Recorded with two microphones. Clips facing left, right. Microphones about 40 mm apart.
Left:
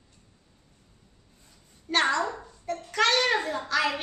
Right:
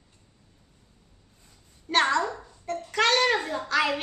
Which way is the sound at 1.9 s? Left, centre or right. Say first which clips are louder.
Right 1 dB; centre.